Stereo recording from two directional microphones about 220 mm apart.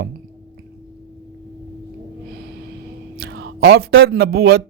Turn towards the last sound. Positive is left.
turn(degrees=-45)  # may be behind; listen again after turning